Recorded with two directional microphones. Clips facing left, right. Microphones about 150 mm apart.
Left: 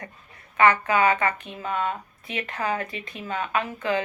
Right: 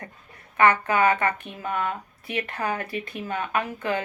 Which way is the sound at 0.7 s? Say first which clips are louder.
Even; 30° right (ahead or behind).